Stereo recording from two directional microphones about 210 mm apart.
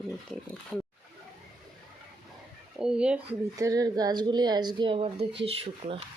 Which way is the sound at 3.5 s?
15° right (ahead or behind).